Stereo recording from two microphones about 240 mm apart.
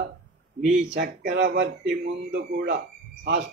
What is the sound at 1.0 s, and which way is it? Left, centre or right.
A man's voice, right.